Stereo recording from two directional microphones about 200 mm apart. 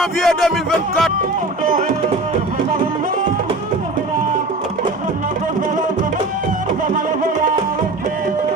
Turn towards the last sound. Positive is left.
turn(degrees=-40)  # may be behind; listen again after turning